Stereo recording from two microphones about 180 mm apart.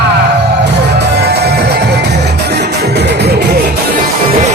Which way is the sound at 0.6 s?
65° right (ahead or behind).